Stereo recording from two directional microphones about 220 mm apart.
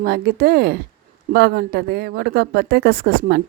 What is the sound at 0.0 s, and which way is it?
Speech, 45° right (ahead or behind).